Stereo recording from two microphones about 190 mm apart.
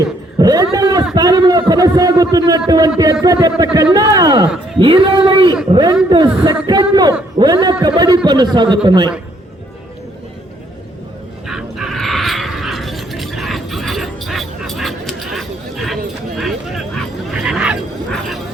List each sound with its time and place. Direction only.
0.3 s a man's voice: 20° right (ahead or behind)
11.4 s a sound: 5° right (ahead or behind)
16.4 s dog: centre (ahead or behind)